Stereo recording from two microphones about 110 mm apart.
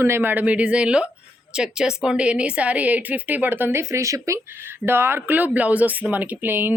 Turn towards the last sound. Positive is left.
turn(degrees=-15)  # may be behind; listen again after turning